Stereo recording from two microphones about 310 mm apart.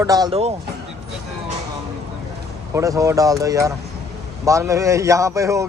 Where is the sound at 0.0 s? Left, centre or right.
Centre.